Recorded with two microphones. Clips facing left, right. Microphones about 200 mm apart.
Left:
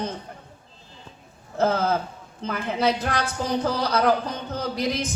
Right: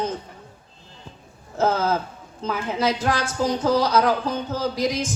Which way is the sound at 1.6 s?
60° left (ahead or behind).